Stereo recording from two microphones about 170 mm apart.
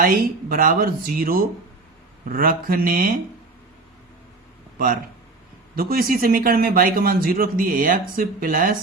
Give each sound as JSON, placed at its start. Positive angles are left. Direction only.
{"t": 0.0, "sound": "a man's voice", "side_deg": -55}
{"t": 5.7, "sound": "a man's voice", "side_deg": -60}